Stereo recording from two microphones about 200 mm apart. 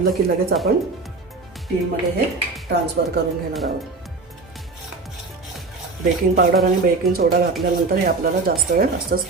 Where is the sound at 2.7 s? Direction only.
60° right (ahead or behind).